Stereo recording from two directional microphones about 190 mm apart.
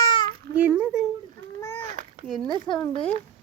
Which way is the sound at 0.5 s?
10° right (ahead or behind).